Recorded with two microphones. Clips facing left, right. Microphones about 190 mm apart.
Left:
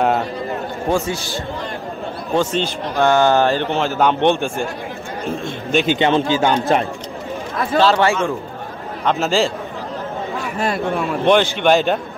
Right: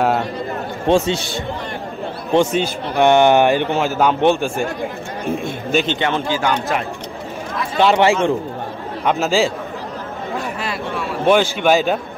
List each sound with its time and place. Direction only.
0.8 s a man's voice: 25° right (ahead or behind); by 4.6 s 5° right (ahead or behind)
5.4 s a sound: 5° right (ahead or behind)
5.9 s a man's voice: 20° left (ahead or behind)
7.8 s a man's voice: 20° right (ahead or behind)
9.0 s a man's voice: 10° right (ahead or behind)
10.6 s speech: 50° left (ahead or behind)
11.2 s speech: 5° right (ahead or behind)